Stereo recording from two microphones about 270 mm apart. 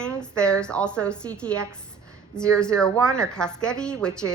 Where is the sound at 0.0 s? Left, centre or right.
Centre.